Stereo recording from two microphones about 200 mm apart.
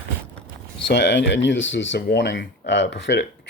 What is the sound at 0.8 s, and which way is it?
Speech, 60° left (ahead or behind).